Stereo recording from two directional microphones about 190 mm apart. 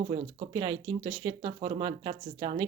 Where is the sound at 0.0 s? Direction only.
30° right (ahead or behind).